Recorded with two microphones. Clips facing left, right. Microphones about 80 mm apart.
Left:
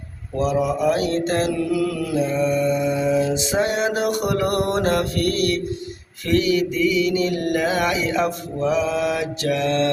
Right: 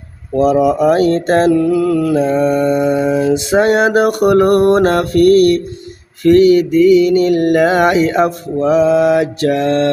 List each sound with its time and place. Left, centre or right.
0.3 s mantra: right